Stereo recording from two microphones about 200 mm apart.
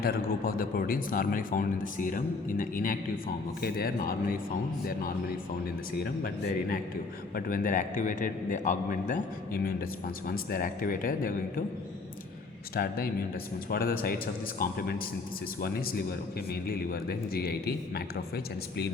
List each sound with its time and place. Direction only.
0.0 s speech: 50° left (ahead or behind)
6.0 s a man's voice: 50° left (ahead or behind)
12.7 s speech: 50° left (ahead or behind)